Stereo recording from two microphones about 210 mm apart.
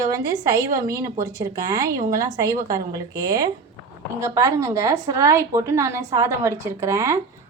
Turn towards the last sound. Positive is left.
turn(degrees=-15)  # may be behind; listen again after turning